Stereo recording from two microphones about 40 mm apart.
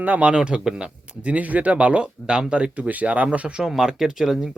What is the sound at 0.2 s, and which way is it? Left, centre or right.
Speech, right.